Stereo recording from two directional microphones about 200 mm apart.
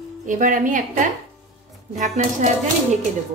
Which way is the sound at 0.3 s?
40° right (ahead or behind).